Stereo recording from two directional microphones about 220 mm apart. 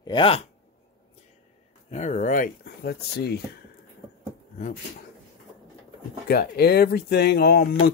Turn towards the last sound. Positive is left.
turn(degrees=45)  # may be behind; listen again after turning